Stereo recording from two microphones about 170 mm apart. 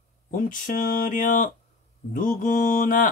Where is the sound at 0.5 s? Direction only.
50° left (ahead or behind).